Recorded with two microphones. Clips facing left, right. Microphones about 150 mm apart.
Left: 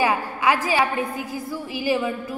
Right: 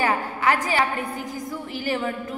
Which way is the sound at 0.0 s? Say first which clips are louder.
Left 1 dB; 10° left (ahead or behind).